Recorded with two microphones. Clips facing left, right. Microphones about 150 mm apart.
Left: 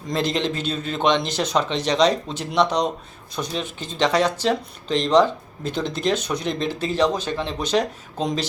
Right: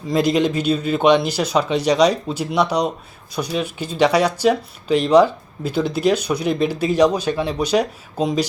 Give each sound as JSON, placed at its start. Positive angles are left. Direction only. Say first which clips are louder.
{"t": 0.1, "sound": "speech", "louder": "right 6 dB", "side_deg": -10}